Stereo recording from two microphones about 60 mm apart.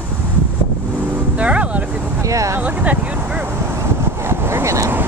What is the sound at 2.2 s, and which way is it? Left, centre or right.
Speech, right.